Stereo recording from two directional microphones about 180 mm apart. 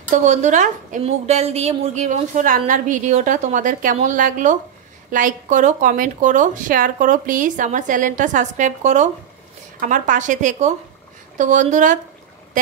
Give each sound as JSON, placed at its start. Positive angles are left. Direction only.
{"t": 0.1, "sound": "a woman's voice", "side_deg": -40}